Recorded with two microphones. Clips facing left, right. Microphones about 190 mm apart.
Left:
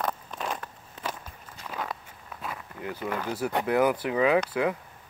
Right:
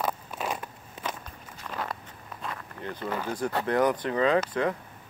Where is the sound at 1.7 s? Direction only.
5° left (ahead or behind).